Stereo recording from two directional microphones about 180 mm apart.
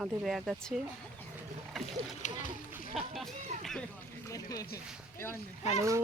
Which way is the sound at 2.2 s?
40° left (ahead or behind).